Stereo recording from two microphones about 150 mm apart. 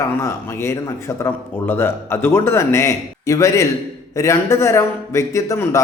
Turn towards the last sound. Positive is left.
turn(degrees=20)  # may be behind; listen again after turning